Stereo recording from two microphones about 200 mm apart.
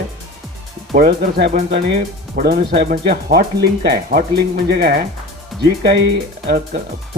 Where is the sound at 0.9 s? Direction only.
50° right (ahead or behind).